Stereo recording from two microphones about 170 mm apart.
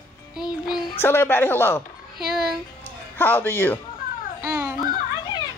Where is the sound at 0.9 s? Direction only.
15° left (ahead or behind).